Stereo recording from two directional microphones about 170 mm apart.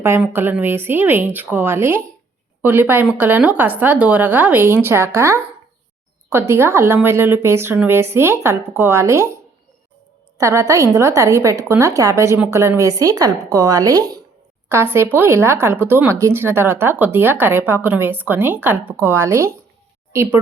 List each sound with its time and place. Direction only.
0.0 s a woman's voice: 15° right (ahead or behind)